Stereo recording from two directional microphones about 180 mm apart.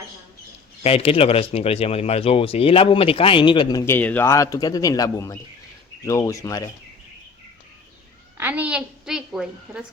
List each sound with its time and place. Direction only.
0.8 s speech: 35° left (ahead or behind)
8.4 s a woman's voice: 10° right (ahead or behind)